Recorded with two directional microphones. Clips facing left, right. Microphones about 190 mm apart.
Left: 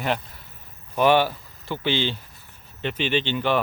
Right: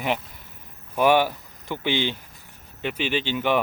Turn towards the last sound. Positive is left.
turn(degrees=-10)  # may be behind; listen again after turning